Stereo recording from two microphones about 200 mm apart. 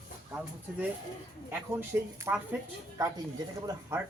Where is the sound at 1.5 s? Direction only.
10° right (ahead or behind).